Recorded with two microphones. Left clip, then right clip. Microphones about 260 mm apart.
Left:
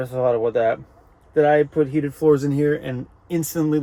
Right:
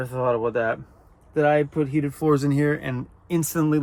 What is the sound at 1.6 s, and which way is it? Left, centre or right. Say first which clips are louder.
Speech: left 4 dB; left.